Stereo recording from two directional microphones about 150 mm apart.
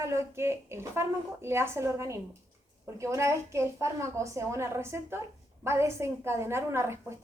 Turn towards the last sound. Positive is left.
turn(degrees=-15)  # may be behind; listen again after turning